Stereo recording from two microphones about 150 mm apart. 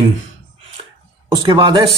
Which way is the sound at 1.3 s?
30° right (ahead or behind).